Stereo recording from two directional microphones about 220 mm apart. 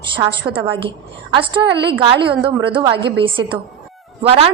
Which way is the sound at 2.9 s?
50° right (ahead or behind).